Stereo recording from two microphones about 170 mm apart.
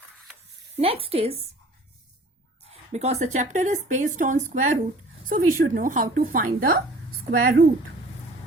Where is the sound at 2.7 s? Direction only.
40° right (ahead or behind); by 7.6 s 60° right (ahead or behind).